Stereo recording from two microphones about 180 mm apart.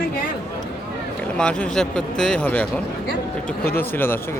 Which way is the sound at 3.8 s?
10° left (ahead or behind).